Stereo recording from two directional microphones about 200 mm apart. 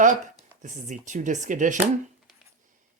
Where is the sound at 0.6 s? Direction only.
40° right (ahead or behind).